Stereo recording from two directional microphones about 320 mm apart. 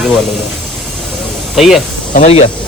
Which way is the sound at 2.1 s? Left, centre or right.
Left.